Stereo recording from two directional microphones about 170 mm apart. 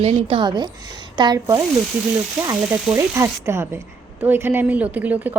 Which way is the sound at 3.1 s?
15° right (ahead or behind).